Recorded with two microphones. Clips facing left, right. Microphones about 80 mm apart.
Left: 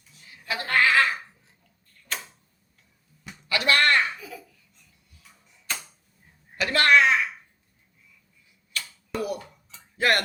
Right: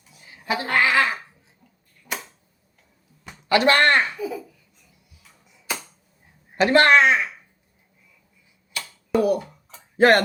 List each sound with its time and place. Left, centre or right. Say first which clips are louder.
0.3 s goat: right 5 dB; right
2.1 s tick-tock: right 3 dB; centre
3.5 s speech: right 5 dB; right
5.7 s a sound: right 3 dB; centre
6.6 s speech: right 5 dB; right
8.8 s a sound: right 10 dB; right
10.0 s speech: right 8 dB; right